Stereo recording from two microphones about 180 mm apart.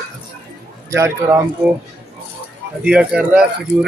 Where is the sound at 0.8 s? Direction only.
15° right (ahead or behind).